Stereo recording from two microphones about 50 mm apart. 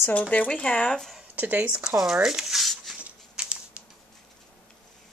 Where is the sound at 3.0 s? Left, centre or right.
Right.